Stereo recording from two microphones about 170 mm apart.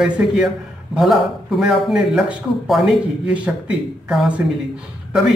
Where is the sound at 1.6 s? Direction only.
5° right (ahead or behind).